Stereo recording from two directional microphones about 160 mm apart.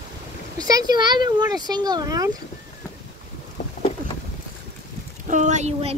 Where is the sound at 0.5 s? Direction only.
25° right (ahead or behind).